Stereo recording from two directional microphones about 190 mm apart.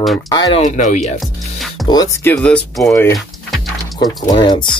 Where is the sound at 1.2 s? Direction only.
Centre (ahead or behind).